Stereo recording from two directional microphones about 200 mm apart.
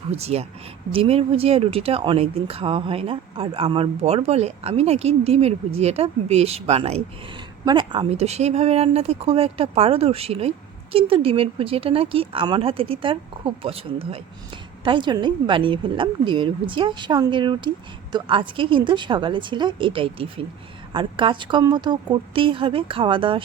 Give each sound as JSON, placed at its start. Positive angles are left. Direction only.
{"t": 0.1, "sound": "speech", "side_deg": -30}